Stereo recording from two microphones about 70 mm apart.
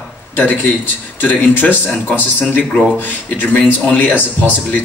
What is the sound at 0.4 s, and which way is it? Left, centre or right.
Speech, left.